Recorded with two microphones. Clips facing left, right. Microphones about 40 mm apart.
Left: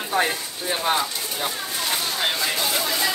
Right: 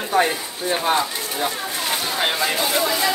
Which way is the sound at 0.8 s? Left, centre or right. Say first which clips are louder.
Right 1 dB; centre.